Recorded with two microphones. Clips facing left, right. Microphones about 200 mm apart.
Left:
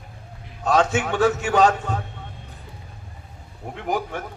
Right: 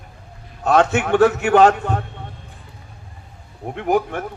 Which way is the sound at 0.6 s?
60° right (ahead or behind).